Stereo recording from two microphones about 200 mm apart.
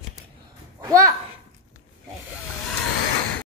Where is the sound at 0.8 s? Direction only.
15° right (ahead or behind).